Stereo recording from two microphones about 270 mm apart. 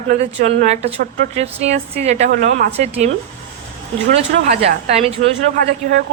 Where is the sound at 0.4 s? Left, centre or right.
Right.